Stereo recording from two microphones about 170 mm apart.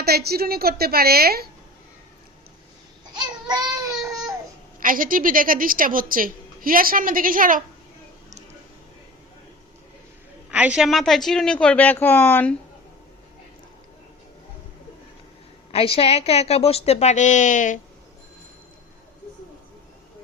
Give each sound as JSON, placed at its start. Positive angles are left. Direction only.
{"t": 0.0, "sound": "a woman's voice", "side_deg": -65}
{"t": 4.8, "sound": "a woman's voice", "side_deg": -55}
{"t": 10.5, "sound": "a woman's voice", "side_deg": -5}
{"t": 15.7, "sound": "a woman's voice", "side_deg": 35}